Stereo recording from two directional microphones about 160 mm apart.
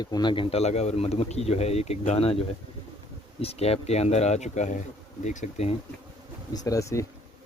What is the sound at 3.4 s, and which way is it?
Speech, 40° left (ahead or behind).